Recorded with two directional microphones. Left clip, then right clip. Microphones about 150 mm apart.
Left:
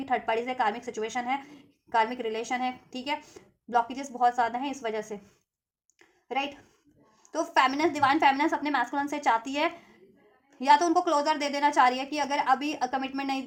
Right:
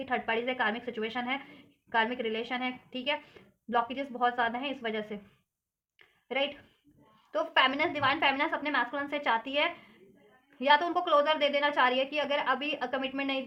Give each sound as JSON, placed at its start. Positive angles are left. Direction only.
{"t": 0.0, "sound": "a woman's voice", "side_deg": 35}
{"t": 6.2, "sound": "a woman's voice", "side_deg": 30}